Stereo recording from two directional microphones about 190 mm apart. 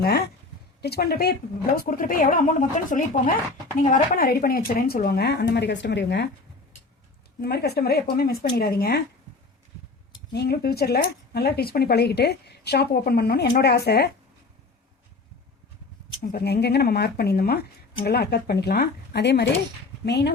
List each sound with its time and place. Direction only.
0.8 s speech: 55° left (ahead or behind)
7.4 s speech: 60° left (ahead or behind)
10.3 s speech: 60° left (ahead or behind)
16.2 s speech: 55° left (ahead or behind)